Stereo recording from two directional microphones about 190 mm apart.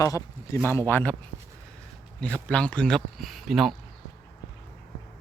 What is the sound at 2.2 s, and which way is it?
Speech, 5° left (ahead or behind).